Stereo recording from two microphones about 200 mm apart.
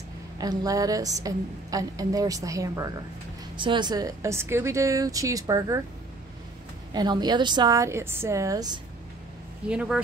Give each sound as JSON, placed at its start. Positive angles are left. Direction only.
{"t": 0.4, "sound": "a woman's voice", "side_deg": -20}
{"t": 6.9, "sound": "a woman's voice", "side_deg": -20}
{"t": 9.7, "sound": "speech", "side_deg": -5}